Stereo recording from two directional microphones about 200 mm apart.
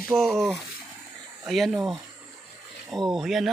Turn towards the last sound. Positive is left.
turn(degrees=0)  # may be behind; listen again after turning